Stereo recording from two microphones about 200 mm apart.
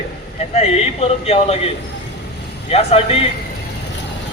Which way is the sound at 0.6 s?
30° left (ahead or behind).